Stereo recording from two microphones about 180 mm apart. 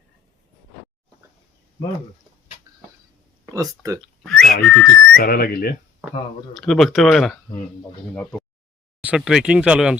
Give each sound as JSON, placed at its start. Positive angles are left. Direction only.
{"t": 3.4, "sound": "speech", "side_deg": -20}
{"t": 4.0, "sound": "speech", "side_deg": 0}
{"t": 5.1, "sound": "speech", "side_deg": 55}
{"t": 6.5, "sound": "speech", "side_deg": 0}
{"t": 9.0, "sound": "speech", "side_deg": -5}